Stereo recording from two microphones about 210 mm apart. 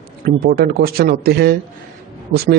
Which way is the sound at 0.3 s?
45° right (ahead or behind).